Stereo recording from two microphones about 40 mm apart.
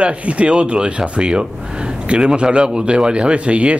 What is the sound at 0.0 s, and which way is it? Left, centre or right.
Speech, right.